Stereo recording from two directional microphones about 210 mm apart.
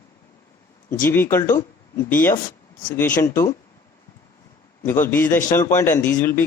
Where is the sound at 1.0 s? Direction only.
10° left (ahead or behind).